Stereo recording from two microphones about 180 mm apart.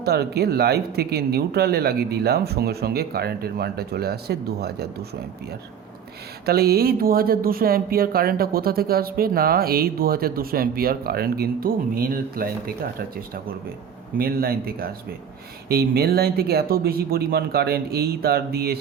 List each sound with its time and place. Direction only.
0.0 s speech: 60° right (ahead or behind)
6.4 s speech: 60° right (ahead or behind)